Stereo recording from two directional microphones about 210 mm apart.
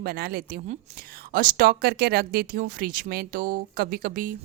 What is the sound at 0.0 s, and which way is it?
A woman's voice, 45° right (ahead or behind).